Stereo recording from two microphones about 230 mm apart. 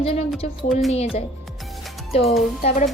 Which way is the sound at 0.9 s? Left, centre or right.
Left.